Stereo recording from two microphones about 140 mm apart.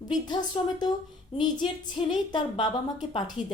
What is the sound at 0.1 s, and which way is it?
A woman's voice, 30° left (ahead or behind).